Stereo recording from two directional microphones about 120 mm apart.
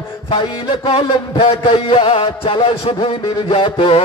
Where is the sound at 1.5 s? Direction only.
50° left (ahead or behind).